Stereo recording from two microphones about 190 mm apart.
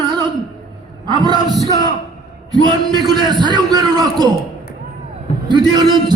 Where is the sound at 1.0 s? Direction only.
20° right (ahead or behind).